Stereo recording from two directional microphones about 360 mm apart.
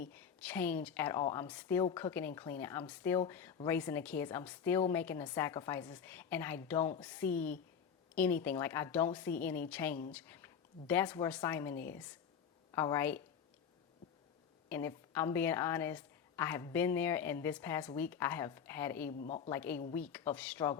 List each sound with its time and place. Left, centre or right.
0.1 s a woman's voice: centre
14.7 s a woman's voice: centre
19.1 s a woman's voice: left
19.5 s a woman's voice: centre